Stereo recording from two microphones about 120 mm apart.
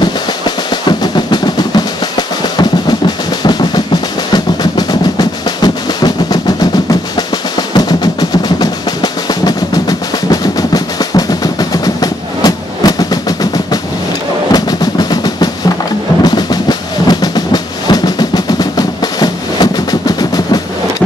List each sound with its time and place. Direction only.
0.8 s drum: 35° left (ahead or behind)
5.6 s percussion: 35° left (ahead or behind)
14.5 s drum: 35° left (ahead or behind)
16.3 s percussion: 35° left (ahead or behind)